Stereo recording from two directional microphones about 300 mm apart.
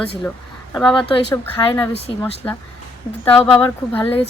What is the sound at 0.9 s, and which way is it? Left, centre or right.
Speech, centre.